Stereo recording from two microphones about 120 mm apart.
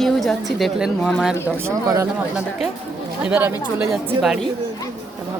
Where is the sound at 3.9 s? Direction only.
5° right (ahead or behind).